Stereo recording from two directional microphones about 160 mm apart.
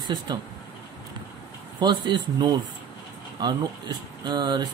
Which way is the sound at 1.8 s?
30° right (ahead or behind).